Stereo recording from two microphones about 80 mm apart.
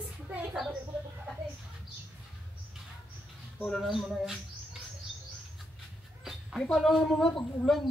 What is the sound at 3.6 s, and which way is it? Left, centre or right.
Speech, centre.